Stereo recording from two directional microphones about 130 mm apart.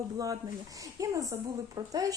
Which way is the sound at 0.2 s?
25° right (ahead or behind).